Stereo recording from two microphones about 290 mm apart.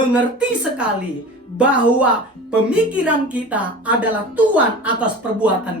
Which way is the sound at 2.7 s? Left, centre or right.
Centre.